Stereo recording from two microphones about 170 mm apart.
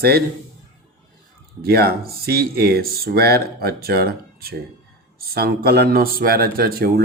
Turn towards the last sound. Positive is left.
turn(degrees=-65)  # may be behind; listen again after turning